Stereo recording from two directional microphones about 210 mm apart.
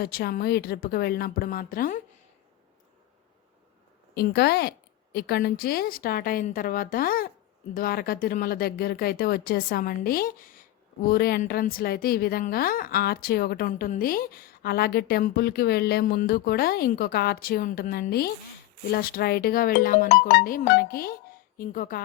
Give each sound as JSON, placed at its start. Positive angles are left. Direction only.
{"t": 0.0, "sound": "a woman's voice", "side_deg": 50}
{"t": 4.1, "sound": "a woman's voice", "side_deg": 50}